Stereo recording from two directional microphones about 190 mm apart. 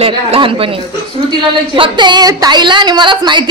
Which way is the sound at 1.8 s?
25° right (ahead or behind).